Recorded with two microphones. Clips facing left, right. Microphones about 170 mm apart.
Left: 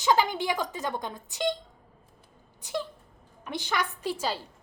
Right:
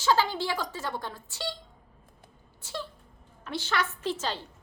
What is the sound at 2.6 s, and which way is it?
A woman's voice, 15° left (ahead or behind).